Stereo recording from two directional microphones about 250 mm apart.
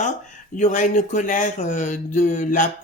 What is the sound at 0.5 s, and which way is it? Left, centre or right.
Speech, left.